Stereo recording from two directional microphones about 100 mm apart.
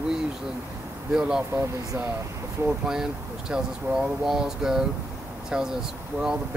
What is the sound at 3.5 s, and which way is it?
Speech, 5° right (ahead or behind).